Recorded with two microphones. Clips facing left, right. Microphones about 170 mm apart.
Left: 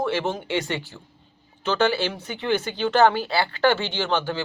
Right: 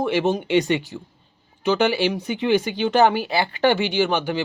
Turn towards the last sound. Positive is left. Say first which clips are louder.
# right 4 dB
turn(degrees=-15)  # may be behind; listen again after turning